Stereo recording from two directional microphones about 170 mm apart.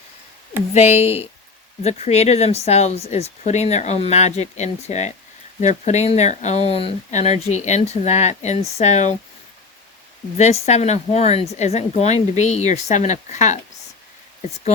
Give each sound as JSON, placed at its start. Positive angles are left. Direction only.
{"t": 0.7, "sound": "speech", "side_deg": 40}
{"t": 10.3, "sound": "speech", "side_deg": 40}